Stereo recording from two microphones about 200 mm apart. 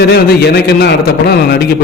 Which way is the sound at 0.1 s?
55° left (ahead or behind).